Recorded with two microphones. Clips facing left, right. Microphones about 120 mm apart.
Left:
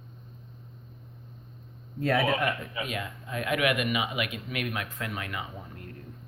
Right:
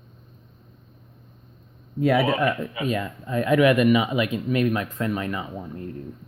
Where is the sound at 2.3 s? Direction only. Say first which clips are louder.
Right 5 dB; 35° right (ahead or behind).